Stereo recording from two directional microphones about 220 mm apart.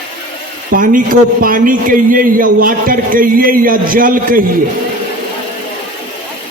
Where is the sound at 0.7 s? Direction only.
40° right (ahead or behind).